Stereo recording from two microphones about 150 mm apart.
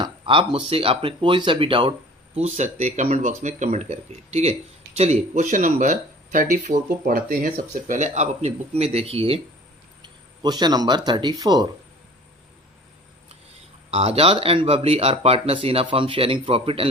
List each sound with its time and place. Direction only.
0.0 s speech: 35° right (ahead or behind)
2.3 s speech: 50° right (ahead or behind)
7.0 s speech: 70° right (ahead or behind); by 9.4 s 40° right (ahead or behind)
10.0 s speech: 30° right (ahead or behind)
13.9 s speech: 45° right (ahead or behind)